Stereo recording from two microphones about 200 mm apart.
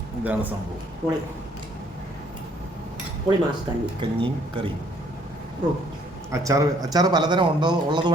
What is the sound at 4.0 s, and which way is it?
Speech, 25° right (ahead or behind).